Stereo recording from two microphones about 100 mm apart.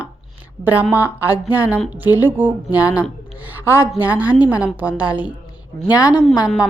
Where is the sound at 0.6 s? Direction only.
15° right (ahead or behind).